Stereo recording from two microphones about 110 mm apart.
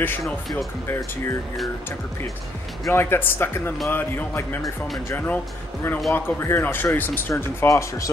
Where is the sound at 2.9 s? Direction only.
20° left (ahead or behind).